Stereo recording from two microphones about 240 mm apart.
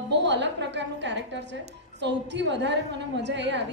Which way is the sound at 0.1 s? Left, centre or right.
Right.